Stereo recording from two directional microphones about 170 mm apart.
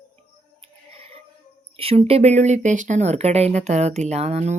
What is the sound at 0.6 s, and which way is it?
Music, 35° right (ahead or behind).